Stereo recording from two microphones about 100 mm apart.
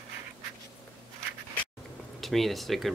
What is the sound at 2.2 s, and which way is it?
Speech, centre (ahead or behind).